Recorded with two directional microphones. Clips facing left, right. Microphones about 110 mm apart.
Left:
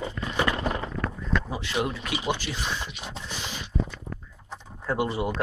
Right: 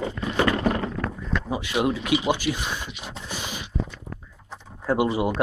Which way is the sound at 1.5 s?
15° right (ahead or behind).